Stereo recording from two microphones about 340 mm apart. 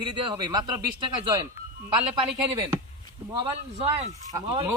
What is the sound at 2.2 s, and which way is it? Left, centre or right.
Speech, centre.